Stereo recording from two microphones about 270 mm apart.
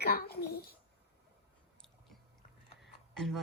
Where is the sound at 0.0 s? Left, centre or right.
Left.